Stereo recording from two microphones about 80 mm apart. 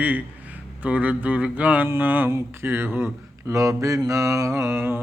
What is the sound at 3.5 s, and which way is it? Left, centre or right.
Mantra, right.